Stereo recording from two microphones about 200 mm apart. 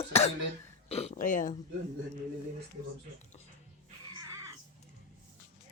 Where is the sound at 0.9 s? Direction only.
35° left (ahead or behind).